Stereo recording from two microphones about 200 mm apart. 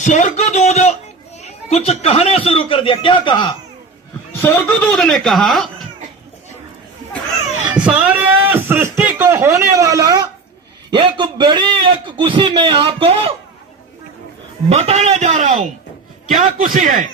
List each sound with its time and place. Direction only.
0.0 s a man's voice: 40° left (ahead or behind)
4.3 s speech: 10° left (ahead or behind)
7.7 s a man's voice: 5° right (ahead or behind); by 13.3 s 30° right (ahead or behind)
14.7 s a man's voice: 35° right (ahead or behind)